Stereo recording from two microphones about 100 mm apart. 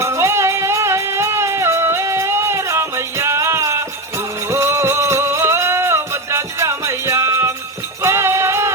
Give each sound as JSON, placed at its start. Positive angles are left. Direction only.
{"t": 0.0, "sound": "music", "side_deg": -30}